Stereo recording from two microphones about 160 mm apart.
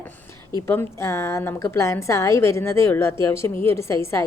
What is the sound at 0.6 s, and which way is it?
A woman's voice, 15° left (ahead or behind).